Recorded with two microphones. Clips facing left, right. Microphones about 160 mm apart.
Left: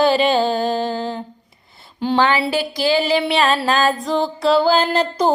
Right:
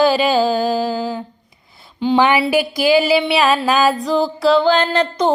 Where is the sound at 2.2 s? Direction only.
15° right (ahead or behind).